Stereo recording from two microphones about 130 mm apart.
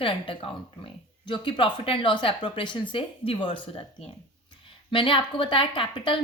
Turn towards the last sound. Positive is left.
turn(degrees=40)  # may be behind; listen again after turning